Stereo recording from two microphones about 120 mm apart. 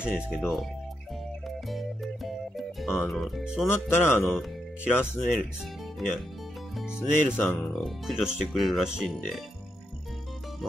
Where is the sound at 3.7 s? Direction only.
20° left (ahead or behind).